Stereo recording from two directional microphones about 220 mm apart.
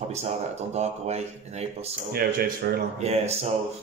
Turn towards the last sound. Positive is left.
turn(degrees=-30)  # may be behind; listen again after turning